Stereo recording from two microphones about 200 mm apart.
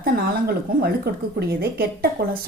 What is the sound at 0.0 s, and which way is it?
Speech, 50° right (ahead or behind).